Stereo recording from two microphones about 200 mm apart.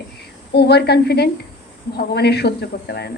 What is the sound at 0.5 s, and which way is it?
A woman's voice, 55° left (ahead or behind).